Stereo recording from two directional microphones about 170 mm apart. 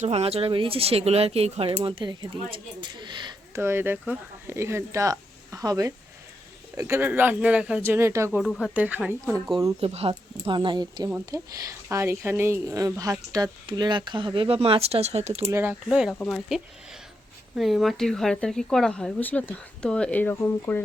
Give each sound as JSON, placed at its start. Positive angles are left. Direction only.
{"t": 0.0, "sound": "speech", "side_deg": -35}
{"t": 3.6, "sound": "speech", "side_deg": -15}
{"t": 8.4, "sound": "speech", "side_deg": 0}
{"t": 9.8, "sound": "speech", "side_deg": -35}
{"t": 15.4, "sound": "speech", "side_deg": -15}
{"t": 15.9, "sound": "speech", "side_deg": -5}
{"t": 17.6, "sound": "speech", "side_deg": 0}